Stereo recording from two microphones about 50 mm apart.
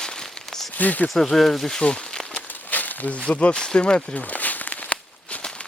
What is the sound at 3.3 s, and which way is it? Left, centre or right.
Speech, left.